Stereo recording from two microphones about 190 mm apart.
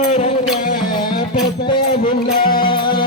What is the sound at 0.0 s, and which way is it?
Music, 40° left (ahead or behind).